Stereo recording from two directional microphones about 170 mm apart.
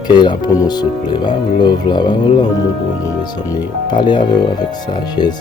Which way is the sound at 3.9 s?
25° left (ahead or behind).